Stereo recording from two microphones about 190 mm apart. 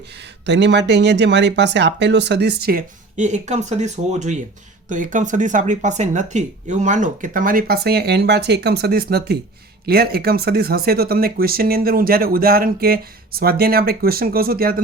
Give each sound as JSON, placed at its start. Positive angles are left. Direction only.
{"t": 0.4, "sound": "speech", "side_deg": -65}